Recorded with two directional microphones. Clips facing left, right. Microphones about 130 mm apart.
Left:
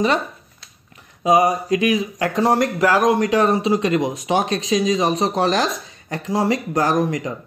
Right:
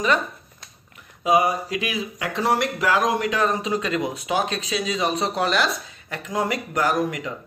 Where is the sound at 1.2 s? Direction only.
40° left (ahead or behind).